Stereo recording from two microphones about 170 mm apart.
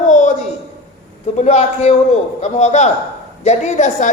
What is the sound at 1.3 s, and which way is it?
A woman's voice, 40° left (ahead or behind).